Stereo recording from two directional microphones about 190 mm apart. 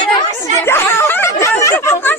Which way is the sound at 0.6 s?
15° left (ahead or behind).